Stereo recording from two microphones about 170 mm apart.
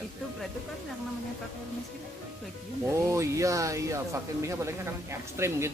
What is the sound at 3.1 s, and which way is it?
Speech, 15° right (ahead or behind).